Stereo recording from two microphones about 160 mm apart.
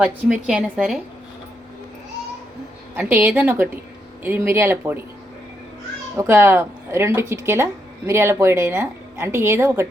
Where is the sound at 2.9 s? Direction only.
15° right (ahead or behind).